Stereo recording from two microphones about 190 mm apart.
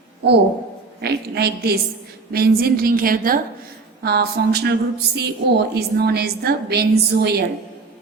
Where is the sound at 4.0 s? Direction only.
55° right (ahead or behind).